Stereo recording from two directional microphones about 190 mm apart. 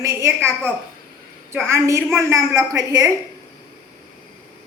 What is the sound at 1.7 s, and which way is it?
A woman's voice, 15° right (ahead or behind).